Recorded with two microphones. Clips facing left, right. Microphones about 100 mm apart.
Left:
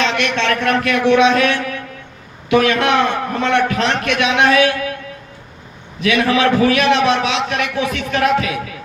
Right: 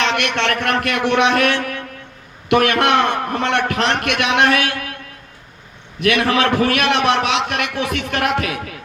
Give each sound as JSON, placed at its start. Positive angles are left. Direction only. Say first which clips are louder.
{"t": 0.0, "sound": "a man's voice", "louder": "left 1 dB", "side_deg": -60}
{"t": 6.0, "sound": "a man's voice", "louder": "left 1 dB", "side_deg": -60}